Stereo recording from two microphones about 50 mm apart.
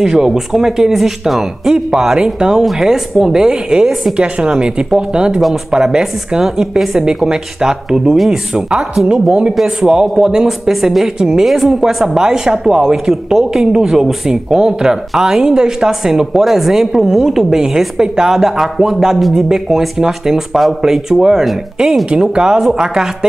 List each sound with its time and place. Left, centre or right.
0.0 s speech: centre
4.2 s speech: centre
22.1 s speech: centre